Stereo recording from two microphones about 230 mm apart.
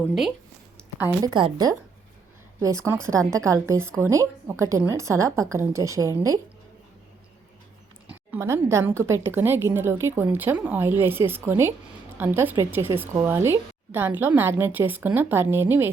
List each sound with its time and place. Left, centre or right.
0.0 s speech: centre
1.3 s a woman's voice: right
8.0 s speech: centre